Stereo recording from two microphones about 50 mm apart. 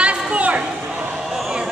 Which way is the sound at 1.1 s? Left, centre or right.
Centre.